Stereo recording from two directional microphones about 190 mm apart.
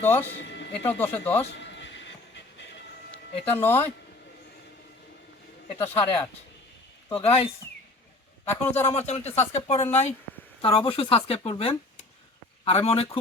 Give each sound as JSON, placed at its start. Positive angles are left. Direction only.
{"t": 0.0, "sound": "speech", "side_deg": 10}
{"t": 0.3, "sound": "speech", "side_deg": 70}
{"t": 0.9, "sound": "speech", "side_deg": 10}
{"t": 1.5, "sound": "a sound", "side_deg": 70}
{"t": 3.5, "sound": "speech", "side_deg": 10}
{"t": 5.8, "sound": "speech", "side_deg": 10}
{"t": 7.2, "sound": "speech", "side_deg": 30}
{"t": 8.4, "sound": "speech", "side_deg": 10}
{"t": 8.9, "sound": "speech", "side_deg": 35}